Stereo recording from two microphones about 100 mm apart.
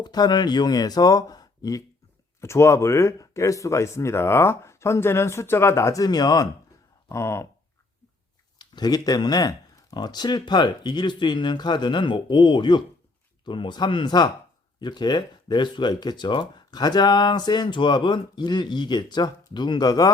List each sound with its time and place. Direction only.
0.0 s speech: 45° left (ahead or behind)
2.4 s speech: 25° left (ahead or behind)
7.1 s speech: 30° left (ahead or behind)
8.5 s speech: 45° left (ahead or behind)